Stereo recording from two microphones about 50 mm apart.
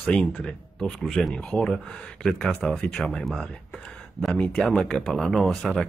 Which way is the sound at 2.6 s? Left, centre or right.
Centre.